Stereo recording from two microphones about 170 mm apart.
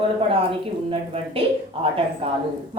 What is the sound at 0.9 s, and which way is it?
Speech, 35° right (ahead or behind).